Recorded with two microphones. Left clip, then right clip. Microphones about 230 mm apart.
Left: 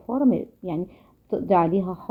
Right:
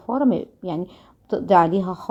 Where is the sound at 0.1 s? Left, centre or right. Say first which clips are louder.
Right 2 dB; right.